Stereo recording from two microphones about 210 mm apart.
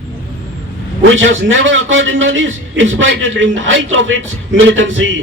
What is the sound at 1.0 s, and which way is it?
A man's voice, 65° right (ahead or behind).